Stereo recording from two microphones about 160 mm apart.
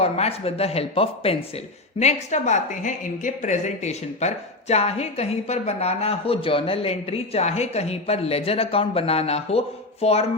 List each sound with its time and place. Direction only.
0.0 s a woman's voice: 40° left (ahead or behind)